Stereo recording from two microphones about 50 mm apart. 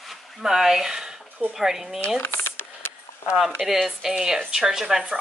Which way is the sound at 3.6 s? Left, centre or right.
Centre.